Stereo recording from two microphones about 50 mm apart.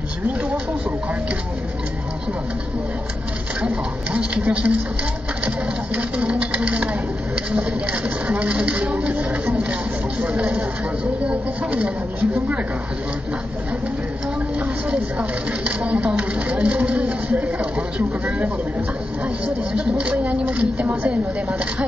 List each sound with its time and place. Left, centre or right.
3.6 s speech: right
5.9 s speech: right
14.9 s speech: right